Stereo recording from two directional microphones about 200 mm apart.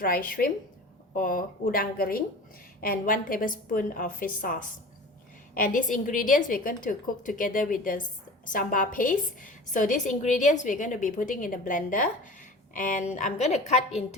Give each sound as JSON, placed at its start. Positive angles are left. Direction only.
{"t": 0.0, "sound": "a woman's voice", "side_deg": 45}
{"t": 5.5, "sound": "a woman's voice", "side_deg": 40}